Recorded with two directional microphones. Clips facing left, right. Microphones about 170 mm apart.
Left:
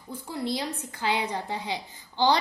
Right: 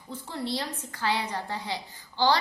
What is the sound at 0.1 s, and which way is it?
A woman's voice, 15° left (ahead or behind).